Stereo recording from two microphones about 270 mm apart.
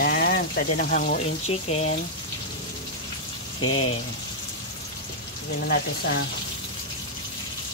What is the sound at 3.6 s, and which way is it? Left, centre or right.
Speech, left.